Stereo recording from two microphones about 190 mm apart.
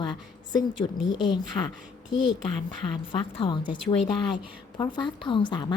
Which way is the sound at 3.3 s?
25° left (ahead or behind).